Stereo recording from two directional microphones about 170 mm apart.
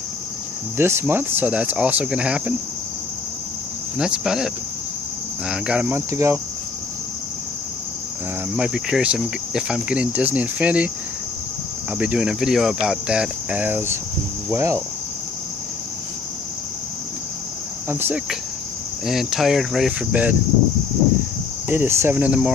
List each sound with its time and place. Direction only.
0.7 s speech: 15° right (ahead or behind)
4.0 s speech: 5° right (ahead or behind)
5.5 s speech: 5° right (ahead or behind)
8.5 s speech: 5° right (ahead or behind)
12.0 s speech: 5° right (ahead or behind)
17.8 s speech: 15° right (ahead or behind)
19.0 s speech: centre (ahead or behind)
21.6 s speech: 10° right (ahead or behind)